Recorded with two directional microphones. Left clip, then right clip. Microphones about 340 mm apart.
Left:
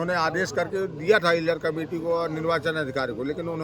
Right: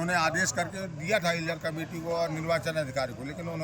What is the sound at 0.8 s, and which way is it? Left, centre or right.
A man's voice, centre.